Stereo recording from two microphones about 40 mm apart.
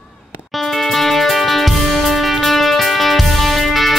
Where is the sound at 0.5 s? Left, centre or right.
Centre.